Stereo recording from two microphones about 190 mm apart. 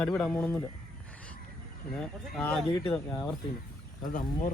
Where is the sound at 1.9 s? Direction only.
5° left (ahead or behind).